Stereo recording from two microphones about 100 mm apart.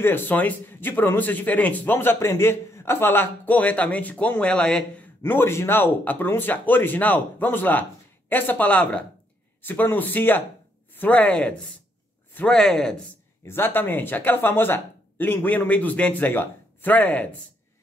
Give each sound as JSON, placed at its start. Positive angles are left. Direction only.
{"t": 0.0, "sound": "a man's voice", "side_deg": 20}
{"t": 5.2, "sound": "a man's voice", "side_deg": 25}
{"t": 13.5, "sound": "speech", "side_deg": 20}